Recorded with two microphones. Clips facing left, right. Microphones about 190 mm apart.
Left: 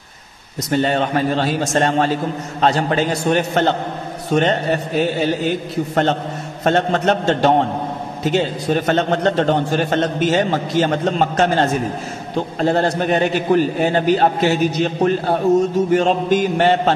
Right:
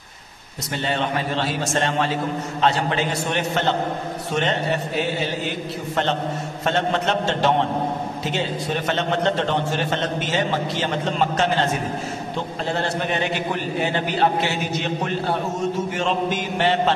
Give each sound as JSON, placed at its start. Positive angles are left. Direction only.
{"t": 0.7, "sound": "a man's voice", "side_deg": 45}
{"t": 6.6, "sound": "a man's voice", "side_deg": 45}
{"t": 8.7, "sound": "a man's voice", "side_deg": 45}